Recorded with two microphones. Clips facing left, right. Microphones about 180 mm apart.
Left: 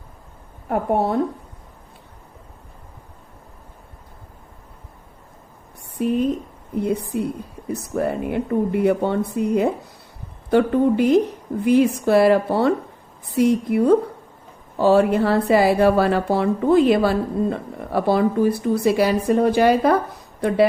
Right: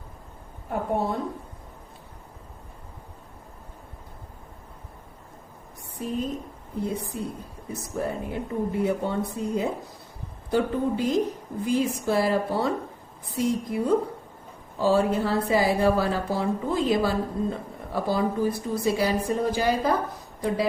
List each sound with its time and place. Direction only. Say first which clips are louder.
0.7 s a woman's voice: left 6 dB; 65° left (ahead or behind)
6.0 s a woman's voice: left 9 dB; 70° left (ahead or behind)